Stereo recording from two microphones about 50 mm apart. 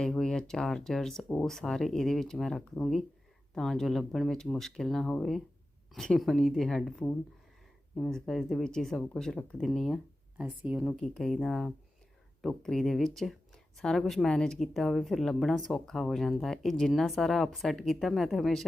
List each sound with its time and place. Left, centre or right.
0.0 s speech: centre
10.3 s speech: right
10.9 s speech: centre